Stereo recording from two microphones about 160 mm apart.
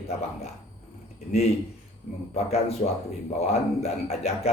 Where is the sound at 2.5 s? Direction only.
40° left (ahead or behind).